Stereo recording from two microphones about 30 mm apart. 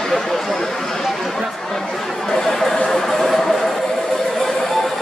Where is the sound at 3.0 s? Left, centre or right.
Centre.